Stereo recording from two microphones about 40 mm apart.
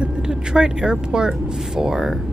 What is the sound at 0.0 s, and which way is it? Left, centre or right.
Vehicle, right.